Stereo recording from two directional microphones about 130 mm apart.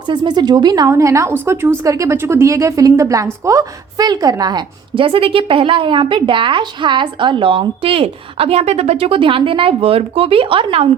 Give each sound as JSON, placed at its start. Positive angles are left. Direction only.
{"t": 0.1, "sound": "a woman's voice", "side_deg": -35}